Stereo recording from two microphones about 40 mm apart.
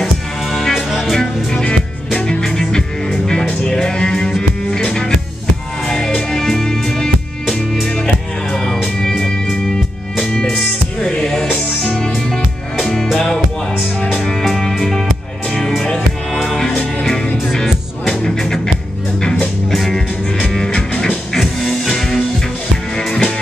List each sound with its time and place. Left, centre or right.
0.0 s music: centre
0.8 s music: centre
1.1 s music: centre
11.0 s music: centre
14.4 s music: centre
17.0 s music: centre
19.7 s music: centre
20.5 s music: centre
21.4 s music: centre